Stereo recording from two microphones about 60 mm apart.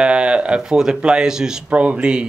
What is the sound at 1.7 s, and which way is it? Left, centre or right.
Speech, right.